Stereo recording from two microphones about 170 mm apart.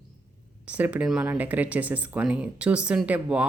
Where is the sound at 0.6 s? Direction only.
10° right (ahead or behind).